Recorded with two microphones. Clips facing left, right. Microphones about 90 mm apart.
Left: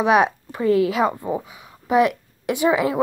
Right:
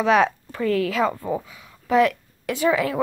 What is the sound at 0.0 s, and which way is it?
Speech, 20° left (ahead or behind).